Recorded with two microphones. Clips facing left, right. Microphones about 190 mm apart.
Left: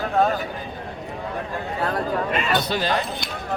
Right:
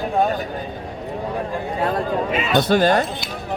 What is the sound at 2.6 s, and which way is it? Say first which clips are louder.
Speech: right 7 dB; 50° right (ahead or behind).